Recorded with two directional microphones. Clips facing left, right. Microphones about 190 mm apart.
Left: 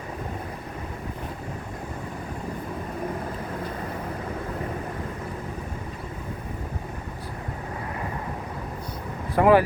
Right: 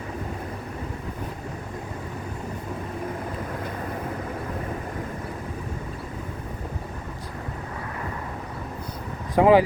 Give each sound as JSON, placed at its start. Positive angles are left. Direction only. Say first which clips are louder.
{"t": 9.3, "sound": "speech", "louder": "right 1 dB", "side_deg": -15}